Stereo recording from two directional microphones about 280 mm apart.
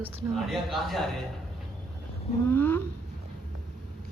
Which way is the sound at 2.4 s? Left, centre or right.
Centre.